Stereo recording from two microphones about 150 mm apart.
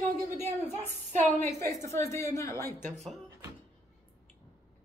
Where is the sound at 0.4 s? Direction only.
15° left (ahead or behind).